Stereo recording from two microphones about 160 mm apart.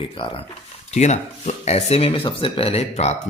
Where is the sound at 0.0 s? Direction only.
35° left (ahead or behind).